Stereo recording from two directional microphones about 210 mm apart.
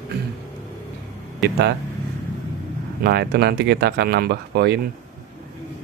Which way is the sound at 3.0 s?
50° right (ahead or behind).